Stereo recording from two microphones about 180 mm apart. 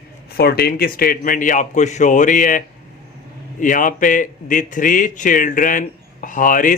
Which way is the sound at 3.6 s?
45° left (ahead or behind).